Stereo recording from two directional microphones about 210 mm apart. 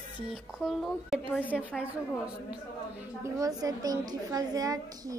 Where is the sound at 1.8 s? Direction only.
5° right (ahead or behind).